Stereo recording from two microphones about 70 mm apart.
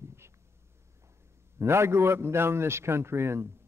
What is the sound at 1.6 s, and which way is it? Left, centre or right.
A man's voice, right.